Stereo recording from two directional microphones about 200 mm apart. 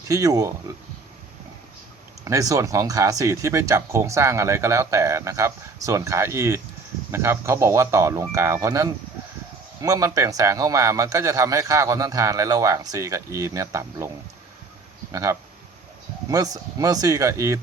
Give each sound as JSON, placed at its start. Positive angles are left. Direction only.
{"t": 0.1, "sound": "speech", "side_deg": -15}
{"t": 2.2, "sound": "speech", "side_deg": -15}
{"t": 15.1, "sound": "speech", "side_deg": -15}